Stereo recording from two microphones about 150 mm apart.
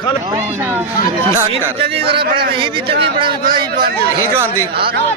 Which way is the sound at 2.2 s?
90° right.